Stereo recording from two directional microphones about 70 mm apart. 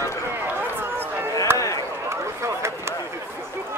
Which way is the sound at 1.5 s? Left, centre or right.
Left.